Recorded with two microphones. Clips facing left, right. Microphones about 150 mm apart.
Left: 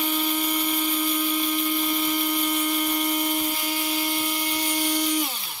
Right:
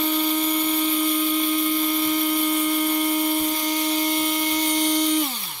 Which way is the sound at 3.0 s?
5° right (ahead or behind).